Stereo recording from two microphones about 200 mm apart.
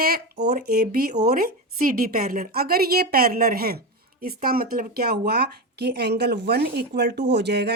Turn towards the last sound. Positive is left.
turn(degrees=-55)  # may be behind; listen again after turning